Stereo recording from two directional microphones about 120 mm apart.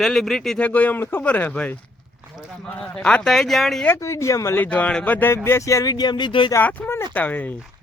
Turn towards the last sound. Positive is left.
turn(degrees=15)  # may be behind; listen again after turning